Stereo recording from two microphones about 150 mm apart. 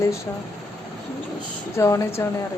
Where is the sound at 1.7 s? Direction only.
20° left (ahead or behind).